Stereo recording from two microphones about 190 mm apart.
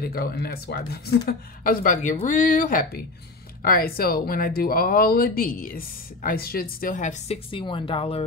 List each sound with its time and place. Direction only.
0.0 s speech: 55° left (ahead or behind); by 7.3 s 40° left (ahead or behind)
7.5 s speech: 25° left (ahead or behind)